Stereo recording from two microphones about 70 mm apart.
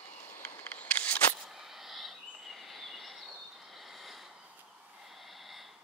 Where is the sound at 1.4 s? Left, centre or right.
Centre.